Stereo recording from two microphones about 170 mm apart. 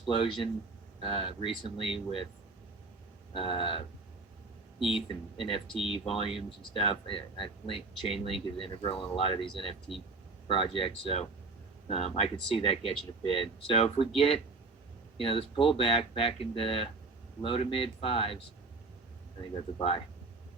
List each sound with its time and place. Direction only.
0.0 s speech: 30° left (ahead or behind)
3.3 s speech: 30° left (ahead or behind)
5.0 s speech: 30° left (ahead or behind)